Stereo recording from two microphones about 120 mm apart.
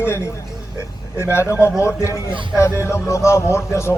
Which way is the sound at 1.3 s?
20° left (ahead or behind).